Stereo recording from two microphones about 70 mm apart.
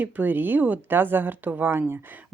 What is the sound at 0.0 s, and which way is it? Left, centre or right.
Speech, right.